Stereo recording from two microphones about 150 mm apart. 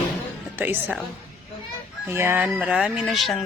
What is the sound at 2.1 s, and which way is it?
Speech, 15° right (ahead or behind).